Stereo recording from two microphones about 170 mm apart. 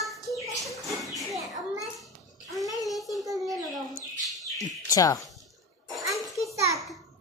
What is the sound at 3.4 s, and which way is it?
Bird, centre (ahead or behind).